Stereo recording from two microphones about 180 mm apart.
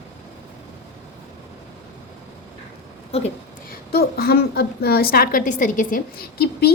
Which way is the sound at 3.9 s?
60° left (ahead or behind).